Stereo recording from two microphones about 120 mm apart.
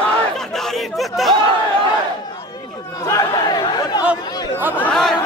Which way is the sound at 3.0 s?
30° left (ahead or behind).